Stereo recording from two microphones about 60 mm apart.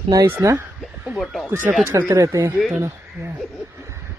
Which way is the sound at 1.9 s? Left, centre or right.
Right.